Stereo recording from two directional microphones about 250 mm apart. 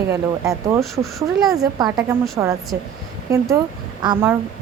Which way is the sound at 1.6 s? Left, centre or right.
Centre.